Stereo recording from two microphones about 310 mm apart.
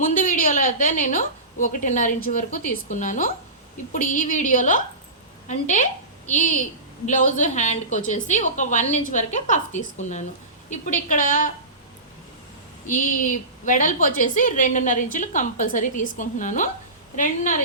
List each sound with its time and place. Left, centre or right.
0.0 s a woman's voice: left
12.9 s a woman's voice: left